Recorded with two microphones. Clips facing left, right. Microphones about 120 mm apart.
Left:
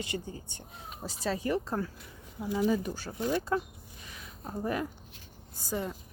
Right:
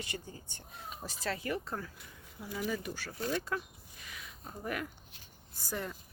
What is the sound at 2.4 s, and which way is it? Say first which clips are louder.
Speech: left 8 dB; 20° left (ahead or behind).